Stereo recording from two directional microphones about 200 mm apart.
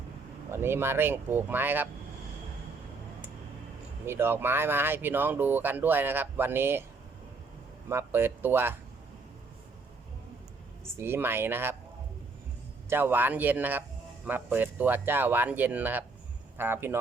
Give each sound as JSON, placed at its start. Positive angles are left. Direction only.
{"t": 0.5, "sound": "speech", "side_deg": -10}
{"t": 4.0, "sound": "speech", "side_deg": -10}
{"t": 7.9, "sound": "speech", "side_deg": -10}
{"t": 10.9, "sound": "speech", "side_deg": -10}
{"t": 12.9, "sound": "speech", "side_deg": -10}